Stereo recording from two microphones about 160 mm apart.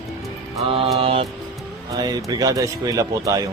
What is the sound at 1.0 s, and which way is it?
Speech, 35° right (ahead or behind).